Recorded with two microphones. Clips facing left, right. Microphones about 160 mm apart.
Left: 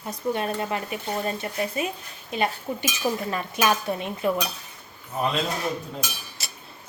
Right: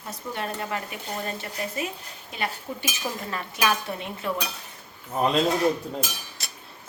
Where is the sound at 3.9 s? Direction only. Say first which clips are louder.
Left 5 dB; 25° left (ahead or behind).